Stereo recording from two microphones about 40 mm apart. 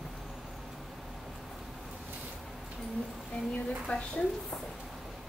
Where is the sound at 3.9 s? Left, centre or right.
Left.